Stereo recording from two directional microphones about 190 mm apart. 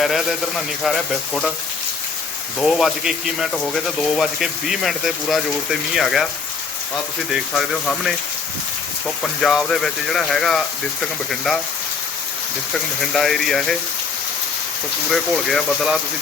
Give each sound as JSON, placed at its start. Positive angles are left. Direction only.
{"t": 0.0, "sound": "speech", "side_deg": 0}
{"t": 2.6, "sound": "speech", "side_deg": 0}
{"t": 7.3, "sound": "speech", "side_deg": 0}
{"t": 13.1, "sound": "speech", "side_deg": 0}
{"t": 15.1, "sound": "speech", "side_deg": 0}